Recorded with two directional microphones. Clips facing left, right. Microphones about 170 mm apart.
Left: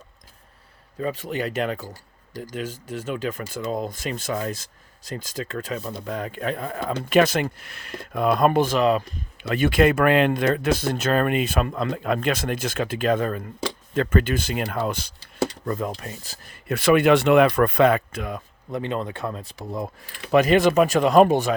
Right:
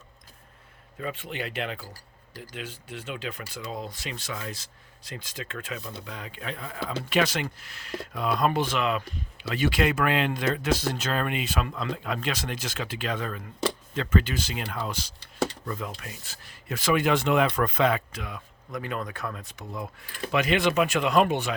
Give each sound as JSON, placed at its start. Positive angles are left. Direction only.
{"t": 0.9, "sound": "speech", "side_deg": 40}
{"t": 9.4, "sound": "speech", "side_deg": 55}
{"t": 18.7, "sound": "speech", "side_deg": 25}